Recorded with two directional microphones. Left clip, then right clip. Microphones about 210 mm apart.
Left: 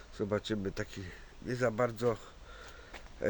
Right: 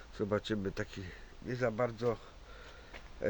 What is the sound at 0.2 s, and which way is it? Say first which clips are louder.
Speech: even; 5° left (ahead or behind).